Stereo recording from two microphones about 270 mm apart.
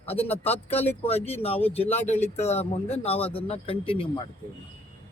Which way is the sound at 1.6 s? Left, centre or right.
Centre.